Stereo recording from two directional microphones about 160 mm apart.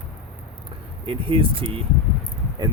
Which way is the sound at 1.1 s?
30° right (ahead or behind).